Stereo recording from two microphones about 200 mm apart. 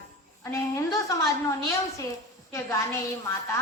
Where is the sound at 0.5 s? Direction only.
15° left (ahead or behind).